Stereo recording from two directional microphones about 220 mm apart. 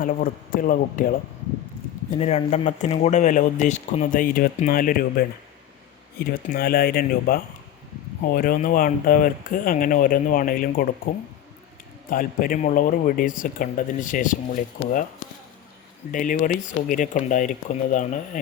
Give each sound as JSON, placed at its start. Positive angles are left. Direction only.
{"t": 0.0, "sound": "speech", "side_deg": 40}
{"t": 2.0, "sound": "speech", "side_deg": 30}
{"t": 16.1, "sound": "speech", "side_deg": 35}